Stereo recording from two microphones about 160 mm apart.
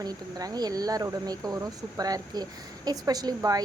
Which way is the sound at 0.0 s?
25° right (ahead or behind).